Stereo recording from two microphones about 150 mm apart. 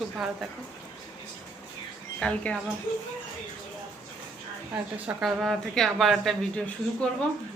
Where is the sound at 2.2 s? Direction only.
5° left (ahead or behind).